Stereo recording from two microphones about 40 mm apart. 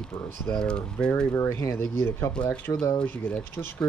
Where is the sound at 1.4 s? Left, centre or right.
Left.